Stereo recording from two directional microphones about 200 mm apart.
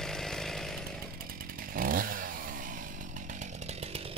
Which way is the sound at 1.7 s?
45° right (ahead or behind).